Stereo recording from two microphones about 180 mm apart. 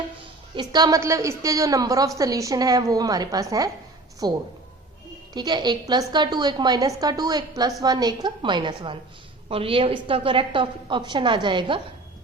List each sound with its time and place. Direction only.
0.5 s a woman's voice: 20° right (ahead or behind)